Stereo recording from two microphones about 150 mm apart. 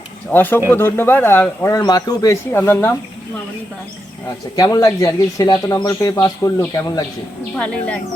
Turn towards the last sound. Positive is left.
turn(degrees=10)  # may be behind; listen again after turning